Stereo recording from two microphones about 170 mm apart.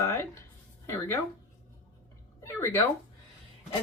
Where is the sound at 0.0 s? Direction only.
15° left (ahead or behind).